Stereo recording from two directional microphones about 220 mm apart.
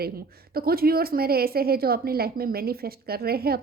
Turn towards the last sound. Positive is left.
turn(degrees=-45)  # may be behind; listen again after turning